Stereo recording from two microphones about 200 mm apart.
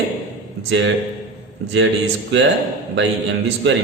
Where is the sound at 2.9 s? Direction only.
65° right (ahead or behind).